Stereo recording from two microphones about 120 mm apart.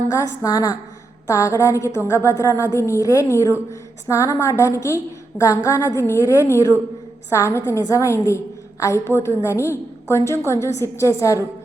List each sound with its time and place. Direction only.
0.1 s a woman's voice: 30° left (ahead or behind)